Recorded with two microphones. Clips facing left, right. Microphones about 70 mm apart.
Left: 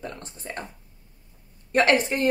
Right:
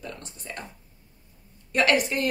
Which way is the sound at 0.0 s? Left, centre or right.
Left.